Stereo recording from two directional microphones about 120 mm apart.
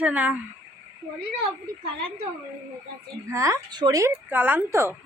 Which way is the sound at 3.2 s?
25° right (ahead or behind).